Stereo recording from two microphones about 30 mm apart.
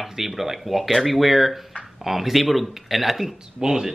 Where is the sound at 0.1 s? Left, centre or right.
Centre.